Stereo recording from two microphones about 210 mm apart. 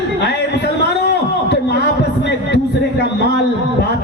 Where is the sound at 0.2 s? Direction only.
50° left (ahead or behind).